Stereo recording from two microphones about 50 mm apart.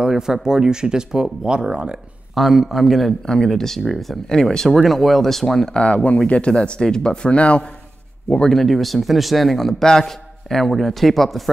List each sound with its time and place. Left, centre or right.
0.0 s speech: centre
2.3 s speech: centre
5.7 s a man's voice: left
8.3 s speech: centre